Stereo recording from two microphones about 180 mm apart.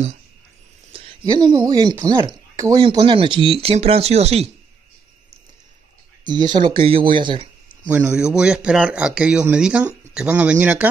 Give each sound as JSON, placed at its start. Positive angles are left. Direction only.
{"t": 0.9, "sound": "speech", "side_deg": -25}
{"t": 6.2, "sound": "speech", "side_deg": -25}
{"t": 7.9, "sound": "speech", "side_deg": -5}